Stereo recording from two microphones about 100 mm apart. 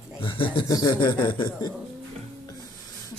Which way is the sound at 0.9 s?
50° left (ahead or behind).